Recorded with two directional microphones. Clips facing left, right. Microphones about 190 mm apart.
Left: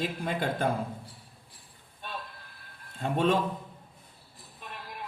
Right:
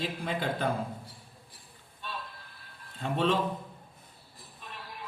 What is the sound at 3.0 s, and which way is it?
Speech, 45° left (ahead or behind).